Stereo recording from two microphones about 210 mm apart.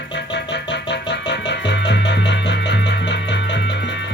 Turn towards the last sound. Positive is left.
turn(degrees=55)  # may be behind; listen again after turning